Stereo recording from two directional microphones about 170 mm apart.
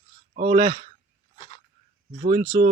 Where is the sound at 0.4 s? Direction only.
45° right (ahead or behind).